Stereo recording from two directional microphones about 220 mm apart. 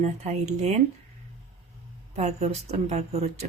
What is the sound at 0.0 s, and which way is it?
Speech, 30° right (ahead or behind).